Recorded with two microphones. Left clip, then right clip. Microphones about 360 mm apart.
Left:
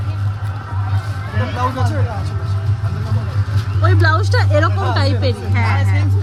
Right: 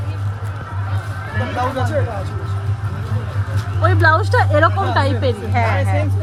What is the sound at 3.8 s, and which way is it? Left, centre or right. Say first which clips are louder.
Speech: right 3 dB; centre.